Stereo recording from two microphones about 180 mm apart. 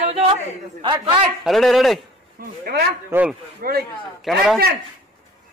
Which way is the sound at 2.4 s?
60° right (ahead or behind).